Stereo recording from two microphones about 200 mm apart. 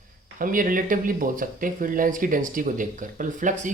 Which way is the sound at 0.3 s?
45° right (ahead or behind).